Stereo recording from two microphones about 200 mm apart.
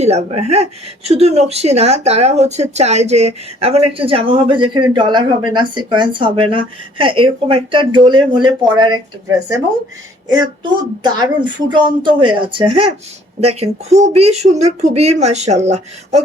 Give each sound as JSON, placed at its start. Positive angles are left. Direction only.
{"t": 0.0, "sound": "speech", "side_deg": -30}
{"t": 10.2, "sound": "speech", "side_deg": -20}